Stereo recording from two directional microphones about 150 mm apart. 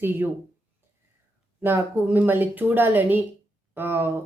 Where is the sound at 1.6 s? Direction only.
15° right (ahead or behind).